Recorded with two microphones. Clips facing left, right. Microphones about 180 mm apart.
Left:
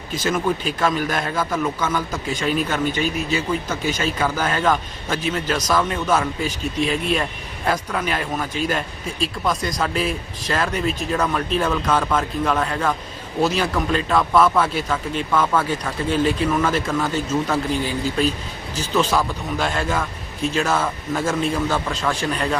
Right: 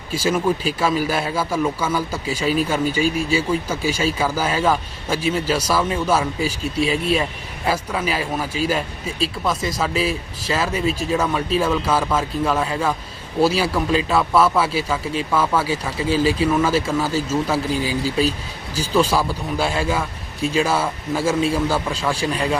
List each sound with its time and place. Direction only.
0.1 s a man's voice: 10° right (ahead or behind)